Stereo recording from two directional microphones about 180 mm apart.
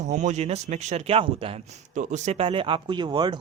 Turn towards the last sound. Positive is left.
turn(degrees=-25)  # may be behind; listen again after turning